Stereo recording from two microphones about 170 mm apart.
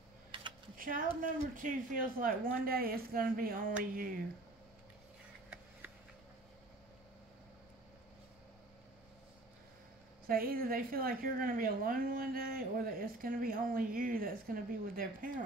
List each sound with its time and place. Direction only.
0.7 s a woman's voice: 55° right (ahead or behind)
10.2 s a woman's voice: 60° right (ahead or behind)